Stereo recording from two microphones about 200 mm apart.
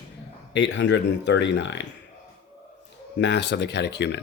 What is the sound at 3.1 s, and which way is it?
Speech, 60° left (ahead or behind).